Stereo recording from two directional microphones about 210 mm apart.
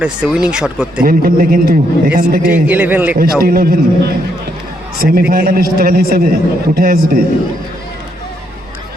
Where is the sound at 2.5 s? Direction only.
10° right (ahead or behind).